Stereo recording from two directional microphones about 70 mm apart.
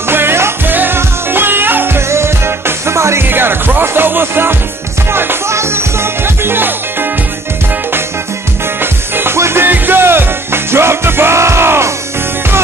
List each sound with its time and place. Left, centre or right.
0.1 s music: right
3.3 s music: right
9.1 s music: right